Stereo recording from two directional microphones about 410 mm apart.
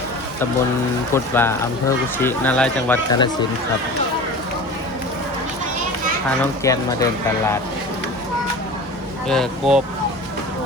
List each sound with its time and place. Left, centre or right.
1.1 s speech: centre
6.7 s speech: centre
9.3 s speech: centre